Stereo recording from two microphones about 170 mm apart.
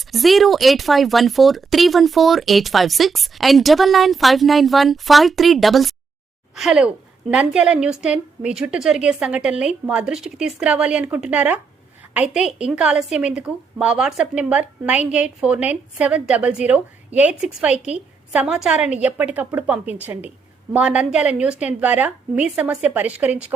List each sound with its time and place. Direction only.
0.1 s a woman's voice: centre (ahead or behind)